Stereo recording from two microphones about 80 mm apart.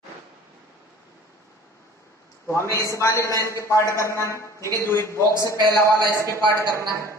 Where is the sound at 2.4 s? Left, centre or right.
Left.